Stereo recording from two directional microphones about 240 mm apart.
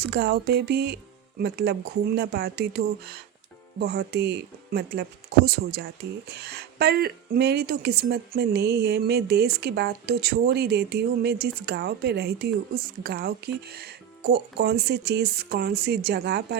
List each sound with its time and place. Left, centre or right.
0.0 s speech: right